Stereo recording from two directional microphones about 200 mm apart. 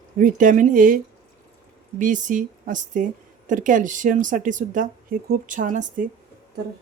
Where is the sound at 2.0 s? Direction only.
40° right (ahead or behind).